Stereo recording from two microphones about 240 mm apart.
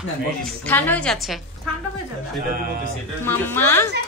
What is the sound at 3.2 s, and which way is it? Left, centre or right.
Speech, centre.